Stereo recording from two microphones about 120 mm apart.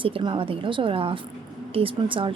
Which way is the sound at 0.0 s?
45° right (ahead or behind).